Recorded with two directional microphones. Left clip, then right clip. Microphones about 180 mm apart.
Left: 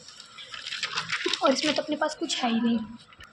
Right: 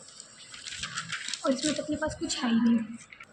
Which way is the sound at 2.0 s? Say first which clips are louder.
Left 4 dB; 10° left (ahead or behind).